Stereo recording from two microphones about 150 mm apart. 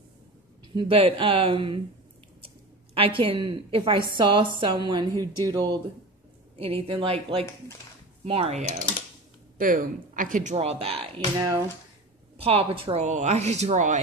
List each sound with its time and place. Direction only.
0.7 s a woman's voice: 40° right (ahead or behind)
6.6 s speech: 40° right (ahead or behind)
9.6 s speech: 70° right (ahead or behind); by 11.1 s 40° right (ahead or behind)
11.3 s speech: 25° right (ahead or behind)
12.4 s speech: 40° right (ahead or behind)